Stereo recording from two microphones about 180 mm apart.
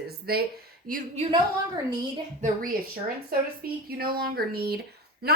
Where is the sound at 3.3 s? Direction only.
55° right (ahead or behind).